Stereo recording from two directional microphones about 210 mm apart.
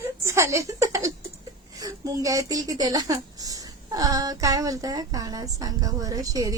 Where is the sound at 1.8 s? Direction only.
15° right (ahead or behind).